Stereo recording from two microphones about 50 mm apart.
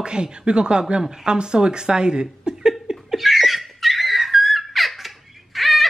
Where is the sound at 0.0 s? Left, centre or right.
Centre.